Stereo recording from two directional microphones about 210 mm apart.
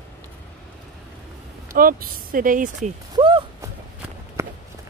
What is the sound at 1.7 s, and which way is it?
Speech, 45° right (ahead or behind).